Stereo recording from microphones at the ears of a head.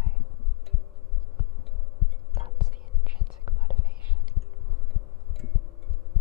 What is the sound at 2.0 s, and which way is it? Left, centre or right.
Whispering, left.